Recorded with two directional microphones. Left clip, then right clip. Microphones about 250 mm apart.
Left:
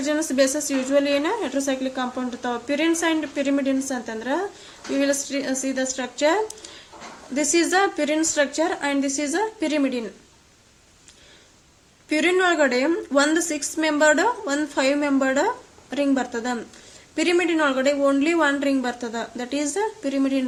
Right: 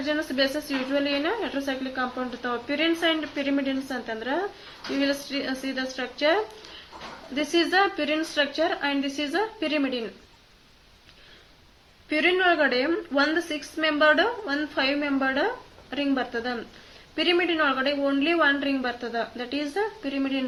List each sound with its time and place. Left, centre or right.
0.0 s a woman's voice: left
12.0 s a woman's voice: left